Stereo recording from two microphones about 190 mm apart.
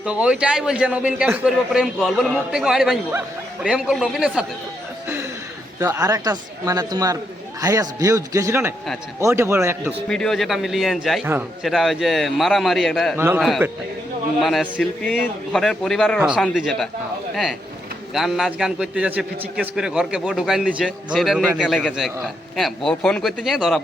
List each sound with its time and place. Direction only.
0.0 s a man's voice: 5° right (ahead or behind)
5.8 s speech: 15° right (ahead or behind)
10.1 s a man's voice: 5° left (ahead or behind)
13.1 s speech: 10° right (ahead or behind)
13.4 s a man's voice: centre (ahead or behind)
18.1 s a man's voice: centre (ahead or behind)